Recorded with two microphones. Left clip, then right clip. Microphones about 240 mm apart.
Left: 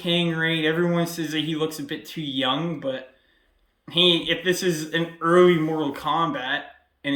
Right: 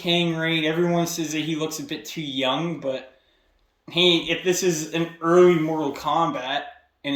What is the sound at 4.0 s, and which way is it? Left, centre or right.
Speech, left.